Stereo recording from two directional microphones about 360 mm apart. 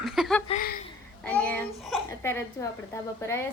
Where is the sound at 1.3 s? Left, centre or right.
Centre.